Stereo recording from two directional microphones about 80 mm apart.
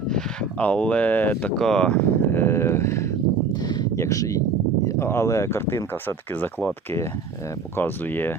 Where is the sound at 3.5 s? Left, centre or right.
Left.